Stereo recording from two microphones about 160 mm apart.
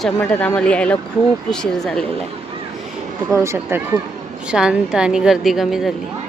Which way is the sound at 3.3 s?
15° right (ahead or behind).